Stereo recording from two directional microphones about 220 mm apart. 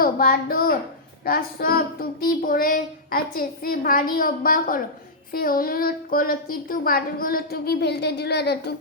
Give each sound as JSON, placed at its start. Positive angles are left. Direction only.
{"t": 0.0, "sound": "a woman's voice", "side_deg": 40}